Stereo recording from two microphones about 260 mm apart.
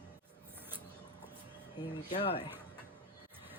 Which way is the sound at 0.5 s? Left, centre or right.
Centre.